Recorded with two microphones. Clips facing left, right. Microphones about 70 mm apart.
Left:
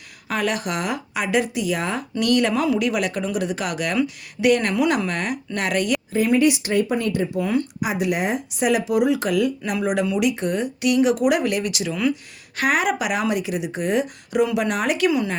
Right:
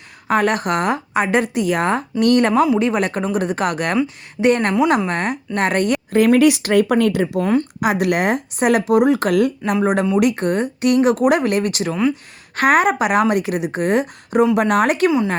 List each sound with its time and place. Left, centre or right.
0.3 s a woman's voice: right
3.9 s a woman's voice: right
6.1 s speech: right
7.8 s speech: right
9.8 s a woman's voice: right